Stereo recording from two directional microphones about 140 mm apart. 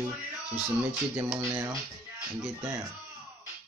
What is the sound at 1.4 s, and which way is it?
Speech, 20° right (ahead or behind).